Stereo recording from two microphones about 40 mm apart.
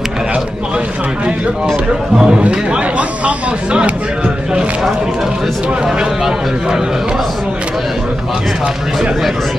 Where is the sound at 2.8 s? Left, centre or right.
Right; by 6.8 s centre.